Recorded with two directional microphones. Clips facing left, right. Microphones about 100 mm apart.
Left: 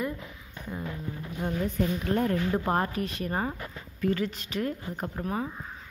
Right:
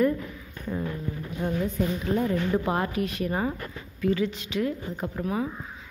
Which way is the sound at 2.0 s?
50° left (ahead or behind).